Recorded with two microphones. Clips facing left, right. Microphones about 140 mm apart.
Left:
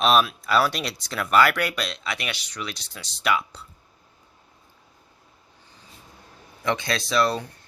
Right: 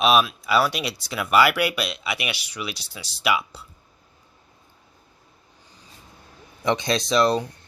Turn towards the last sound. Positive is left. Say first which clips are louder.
# right 3 dB
turn(degrees=-20)  # may be behind; listen again after turning